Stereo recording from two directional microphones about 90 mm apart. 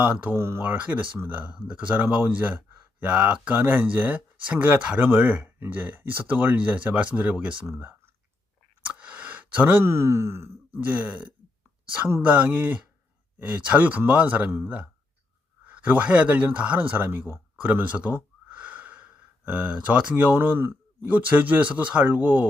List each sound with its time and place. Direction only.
0.0 s speech: 20° right (ahead or behind)
0.6 s speech: 15° right (ahead or behind)
8.8 s a sound: 15° right (ahead or behind)
9.8 s speech: 30° right (ahead or behind)
10.8 s speech: 15° right (ahead or behind)